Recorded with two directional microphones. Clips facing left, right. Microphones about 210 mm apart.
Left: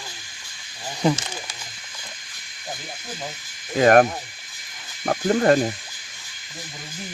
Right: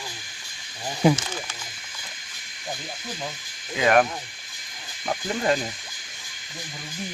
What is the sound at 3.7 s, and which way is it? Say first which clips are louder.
Speech: left 5 dB; 45° left (ahead or behind).